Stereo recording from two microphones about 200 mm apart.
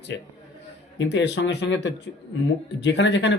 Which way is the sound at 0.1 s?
65° left (ahead or behind).